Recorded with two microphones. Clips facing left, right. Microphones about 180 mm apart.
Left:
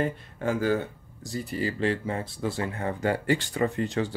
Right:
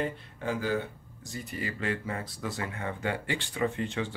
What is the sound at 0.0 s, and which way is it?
Speech, 45° left (ahead or behind).